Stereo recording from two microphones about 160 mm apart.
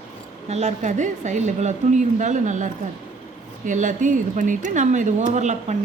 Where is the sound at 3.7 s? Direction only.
50° right (ahead or behind).